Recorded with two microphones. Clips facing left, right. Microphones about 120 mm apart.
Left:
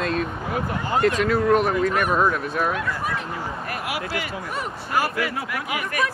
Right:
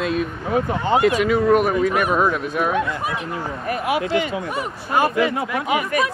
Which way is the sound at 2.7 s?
20° right (ahead or behind).